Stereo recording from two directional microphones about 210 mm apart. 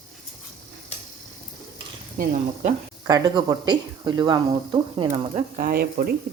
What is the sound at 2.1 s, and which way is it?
Speech, 40° right (ahead or behind).